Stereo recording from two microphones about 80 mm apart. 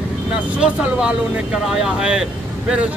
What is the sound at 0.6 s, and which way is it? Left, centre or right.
Speech, centre.